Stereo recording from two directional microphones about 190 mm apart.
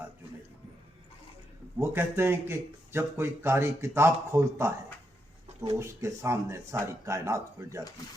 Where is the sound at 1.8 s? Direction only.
10° right (ahead or behind).